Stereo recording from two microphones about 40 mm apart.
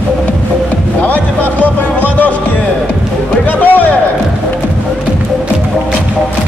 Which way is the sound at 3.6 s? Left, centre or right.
Left.